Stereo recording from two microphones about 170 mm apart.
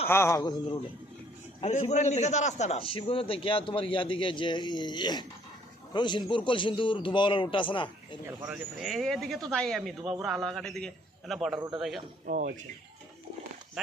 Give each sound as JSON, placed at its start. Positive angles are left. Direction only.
{"t": 0.1, "sound": "a man's voice", "side_deg": 15}
{"t": 1.6, "sound": "a man's voice", "side_deg": 40}
{"t": 8.4, "sound": "speech", "side_deg": -5}
{"t": 12.2, "sound": "speech", "side_deg": -55}